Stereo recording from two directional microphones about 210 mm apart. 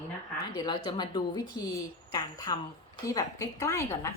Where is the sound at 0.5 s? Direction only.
20° left (ahead or behind).